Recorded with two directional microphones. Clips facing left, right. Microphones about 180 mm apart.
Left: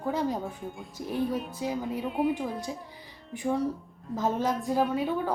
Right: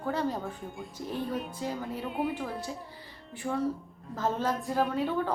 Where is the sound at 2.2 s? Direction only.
Centre (ahead or behind).